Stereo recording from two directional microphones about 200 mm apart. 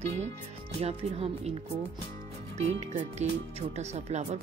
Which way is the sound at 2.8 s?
35° right (ahead or behind).